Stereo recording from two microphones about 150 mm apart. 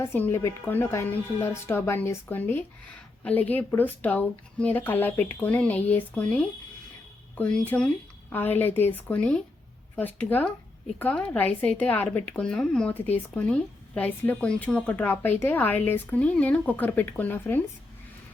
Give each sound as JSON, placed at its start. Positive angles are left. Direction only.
{"t": 0.0, "sound": "speech", "side_deg": 15}